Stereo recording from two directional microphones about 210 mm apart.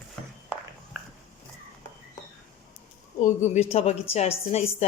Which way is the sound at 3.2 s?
35° left (ahead or behind).